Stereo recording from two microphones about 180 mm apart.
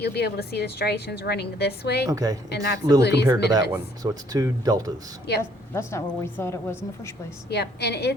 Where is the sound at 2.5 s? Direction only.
60° left (ahead or behind).